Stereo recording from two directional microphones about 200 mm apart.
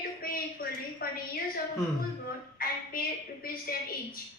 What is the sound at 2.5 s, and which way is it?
A woman's voice, 45° left (ahead or behind).